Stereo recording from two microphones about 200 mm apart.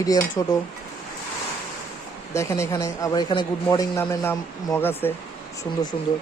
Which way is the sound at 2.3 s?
15° left (ahead or behind).